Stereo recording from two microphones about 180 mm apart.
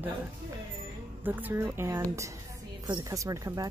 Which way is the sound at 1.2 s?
10° right (ahead or behind).